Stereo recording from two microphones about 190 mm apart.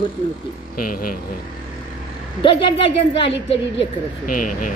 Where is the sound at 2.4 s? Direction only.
25° left (ahead or behind).